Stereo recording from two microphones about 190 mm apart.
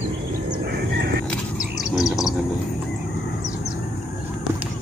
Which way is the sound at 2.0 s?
Centre (ahead or behind).